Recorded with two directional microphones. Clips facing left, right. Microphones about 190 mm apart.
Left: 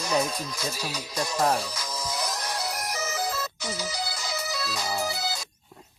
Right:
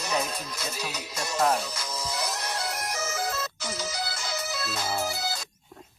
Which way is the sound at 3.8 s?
Centre (ahead or behind).